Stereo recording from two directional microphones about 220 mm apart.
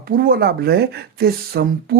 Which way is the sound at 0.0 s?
45° right (ahead or behind).